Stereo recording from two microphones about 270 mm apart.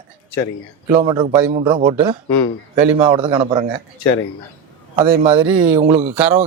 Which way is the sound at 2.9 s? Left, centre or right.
Centre.